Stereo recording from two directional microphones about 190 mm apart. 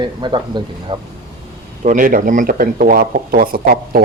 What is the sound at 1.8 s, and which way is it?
A man's voice, 45° right (ahead or behind).